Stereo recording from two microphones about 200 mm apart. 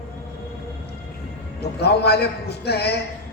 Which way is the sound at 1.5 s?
55° left (ahead or behind).